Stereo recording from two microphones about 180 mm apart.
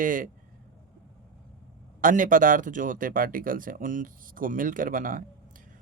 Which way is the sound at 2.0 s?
45° right (ahead or behind).